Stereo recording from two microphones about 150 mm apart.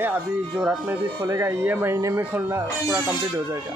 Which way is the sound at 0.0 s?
10° right (ahead or behind).